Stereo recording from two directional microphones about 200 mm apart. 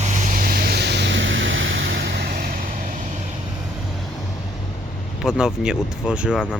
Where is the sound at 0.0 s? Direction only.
40° right (ahead or behind).